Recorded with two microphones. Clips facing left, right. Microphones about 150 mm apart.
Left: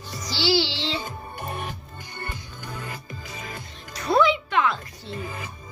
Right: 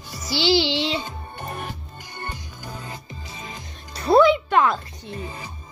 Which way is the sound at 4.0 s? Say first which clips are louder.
Right 5 dB; 35° right (ahead or behind).